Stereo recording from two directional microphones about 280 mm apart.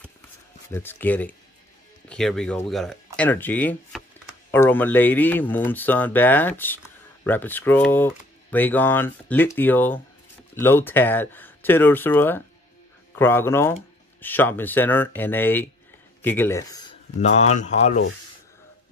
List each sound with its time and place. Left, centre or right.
0.7 s speech: centre
17.2 s speech: left